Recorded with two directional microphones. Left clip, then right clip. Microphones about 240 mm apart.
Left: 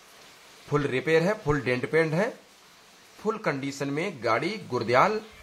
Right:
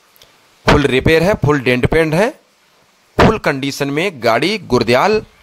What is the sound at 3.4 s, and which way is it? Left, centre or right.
Speech, right.